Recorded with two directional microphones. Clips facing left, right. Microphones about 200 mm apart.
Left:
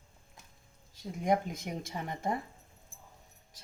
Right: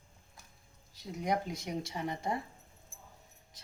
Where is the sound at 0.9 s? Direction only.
50° left (ahead or behind).